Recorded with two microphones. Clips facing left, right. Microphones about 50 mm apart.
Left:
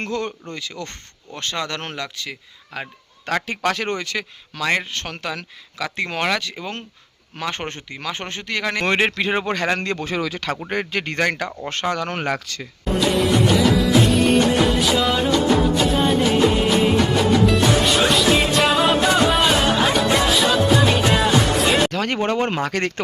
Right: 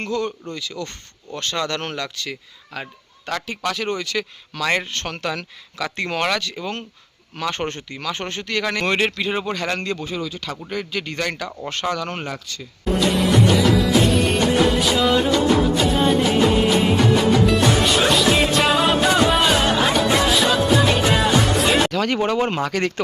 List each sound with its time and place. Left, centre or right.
0.1 s speech: left
1.4 s speech: centre
3.2 s speech: left
4.2 s speech: centre
9.1 s speech: left
10.0 s speech: left
10.7 s speech: left
11.2 s speech: left
12.9 s music: centre
21.9 s speech: left